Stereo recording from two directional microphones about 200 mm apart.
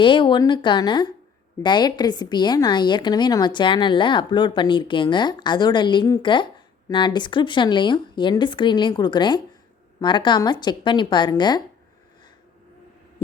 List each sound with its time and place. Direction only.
0.0 s a woman's voice: 25° left (ahead or behind)